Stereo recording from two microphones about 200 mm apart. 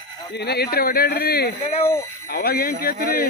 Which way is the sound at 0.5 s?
50° left (ahead or behind).